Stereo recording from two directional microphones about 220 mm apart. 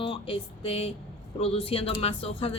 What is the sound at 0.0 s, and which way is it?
A man's voice, 25° left (ahead or behind).